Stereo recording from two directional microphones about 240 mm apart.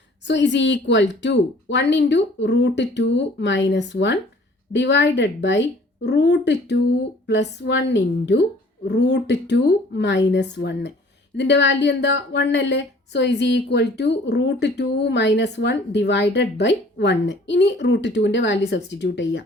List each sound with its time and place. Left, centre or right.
0.3 s a woman's voice: left